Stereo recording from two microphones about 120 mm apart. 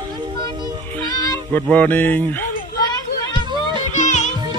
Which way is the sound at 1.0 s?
35° left (ahead or behind).